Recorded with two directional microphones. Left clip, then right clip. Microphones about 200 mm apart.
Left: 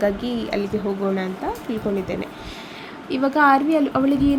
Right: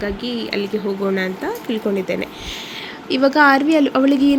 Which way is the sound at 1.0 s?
Centre (ahead or behind).